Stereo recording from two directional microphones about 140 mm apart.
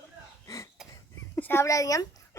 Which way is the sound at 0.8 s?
5° right (ahead or behind).